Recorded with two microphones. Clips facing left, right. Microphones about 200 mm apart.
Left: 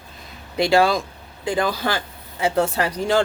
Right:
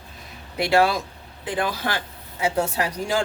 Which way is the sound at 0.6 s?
5° right (ahead or behind).